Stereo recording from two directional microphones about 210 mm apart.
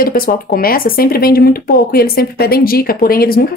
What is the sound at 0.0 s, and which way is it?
Speech, 45° left (ahead or behind).